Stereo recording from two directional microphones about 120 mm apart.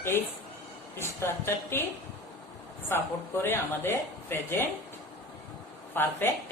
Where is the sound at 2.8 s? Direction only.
20° left (ahead or behind).